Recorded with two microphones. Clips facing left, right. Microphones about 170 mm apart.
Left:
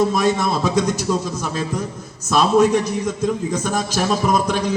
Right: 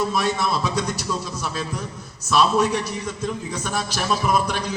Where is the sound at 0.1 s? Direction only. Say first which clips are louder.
Left 4 dB; 45° left (ahead or behind).